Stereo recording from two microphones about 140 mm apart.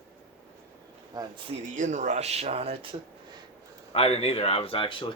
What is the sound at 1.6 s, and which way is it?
Speech, 60° right (ahead or behind).